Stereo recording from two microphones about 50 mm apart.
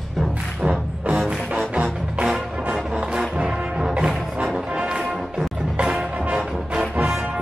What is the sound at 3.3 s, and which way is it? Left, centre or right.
Music, centre.